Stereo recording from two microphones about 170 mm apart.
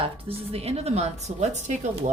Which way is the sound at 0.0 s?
35° right (ahead or behind).